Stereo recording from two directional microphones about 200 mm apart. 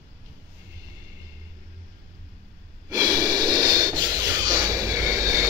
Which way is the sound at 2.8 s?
15° right (ahead or behind).